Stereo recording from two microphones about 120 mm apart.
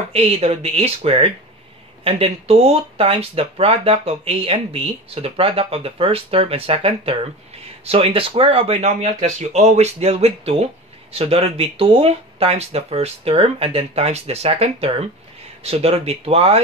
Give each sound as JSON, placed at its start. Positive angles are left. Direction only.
{"t": 0.1, "sound": "speech", "side_deg": -60}
{"t": 9.2, "sound": "speech", "side_deg": -70}